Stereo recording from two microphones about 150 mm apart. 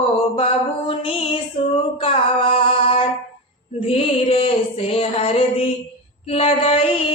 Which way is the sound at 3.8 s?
40° left (ahead or behind).